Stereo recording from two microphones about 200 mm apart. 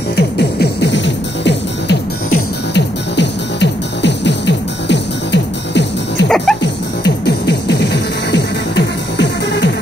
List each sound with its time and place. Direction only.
0.1 s music: 55° left (ahead or behind)
6.2 s music: 5° left (ahead or behind)
7.2 s music: 60° left (ahead or behind)